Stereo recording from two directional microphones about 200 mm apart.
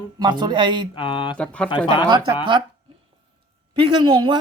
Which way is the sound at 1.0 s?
25° left (ahead or behind).